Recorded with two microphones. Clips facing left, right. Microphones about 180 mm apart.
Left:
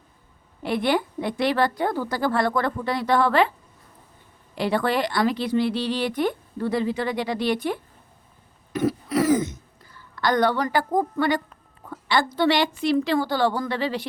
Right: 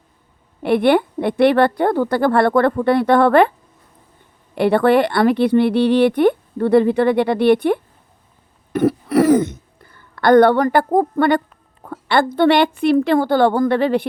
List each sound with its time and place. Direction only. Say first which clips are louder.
0.6 s speech: right 8 dB; 60° right (ahead or behind)
4.5 s speech: right 9 dB; 60° right (ahead or behind)